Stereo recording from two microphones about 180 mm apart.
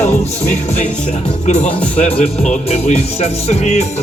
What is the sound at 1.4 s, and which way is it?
Music, 40° left (ahead or behind).